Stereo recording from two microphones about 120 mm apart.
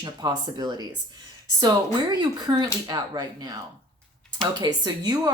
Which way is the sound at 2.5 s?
35° right (ahead or behind).